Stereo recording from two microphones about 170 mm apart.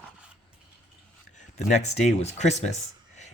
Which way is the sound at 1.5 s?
45° left (ahead or behind).